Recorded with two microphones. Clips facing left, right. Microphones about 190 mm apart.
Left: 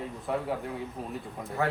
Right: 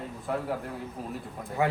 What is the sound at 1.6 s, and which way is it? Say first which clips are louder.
Speech: right 2 dB; 15° right (ahead or behind).